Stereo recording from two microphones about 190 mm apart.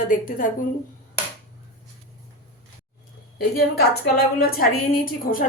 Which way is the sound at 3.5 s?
55° left (ahead or behind).